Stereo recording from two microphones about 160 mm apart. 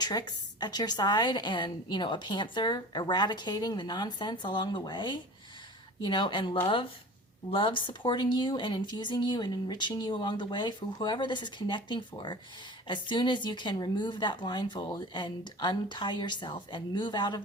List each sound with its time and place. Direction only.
0.0 s a woman's voice: 25° left (ahead or behind)